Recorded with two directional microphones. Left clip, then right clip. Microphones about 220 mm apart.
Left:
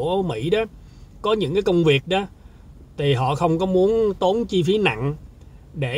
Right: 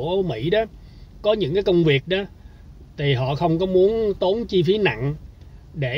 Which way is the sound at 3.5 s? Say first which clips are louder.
Right 4 dB; 15° left (ahead or behind).